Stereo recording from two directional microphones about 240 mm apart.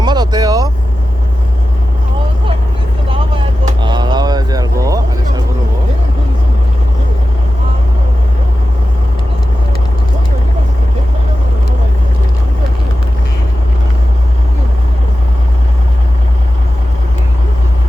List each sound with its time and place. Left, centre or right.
0.0 s vehicle: centre
3.1 s vehicle: centre